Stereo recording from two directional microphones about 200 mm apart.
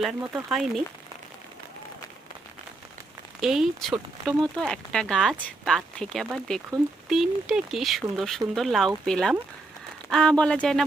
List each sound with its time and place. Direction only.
0.0 s speech: 5° right (ahead or behind)
3.4 s speech: centre (ahead or behind)